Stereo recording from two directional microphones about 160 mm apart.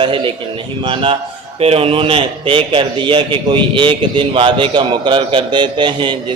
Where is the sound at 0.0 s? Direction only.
30° right (ahead or behind).